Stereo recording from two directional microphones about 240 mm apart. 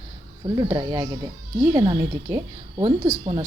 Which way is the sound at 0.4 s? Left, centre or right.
Centre.